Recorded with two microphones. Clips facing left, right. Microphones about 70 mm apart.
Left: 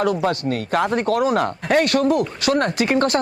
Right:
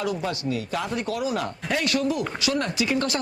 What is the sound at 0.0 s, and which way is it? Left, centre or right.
Speech, left.